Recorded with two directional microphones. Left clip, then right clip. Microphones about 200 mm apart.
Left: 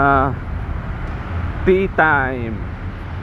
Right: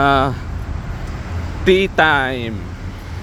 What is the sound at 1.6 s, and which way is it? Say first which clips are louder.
Speech: right 2 dB; 25° right (ahead or behind).